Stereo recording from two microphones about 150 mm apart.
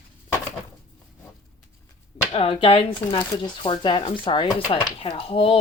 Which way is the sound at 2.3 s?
40° left (ahead or behind).